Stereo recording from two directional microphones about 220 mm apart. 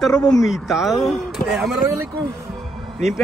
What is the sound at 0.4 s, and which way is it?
Speech, centre (ahead or behind).